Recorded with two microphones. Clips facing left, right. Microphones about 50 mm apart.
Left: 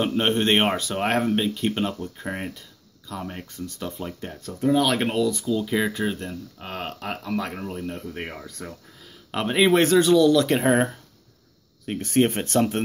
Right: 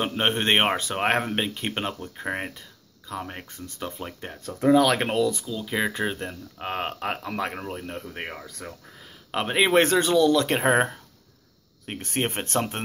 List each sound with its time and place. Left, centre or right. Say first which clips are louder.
0.0 s speech: left 2 dB; centre
4.6 s speech: right 2 dB; right
5.7 s speech: left 2 dB; centre
8.3 s speech: left 1 dB; centre
9.3 s speech: left 1 dB; centre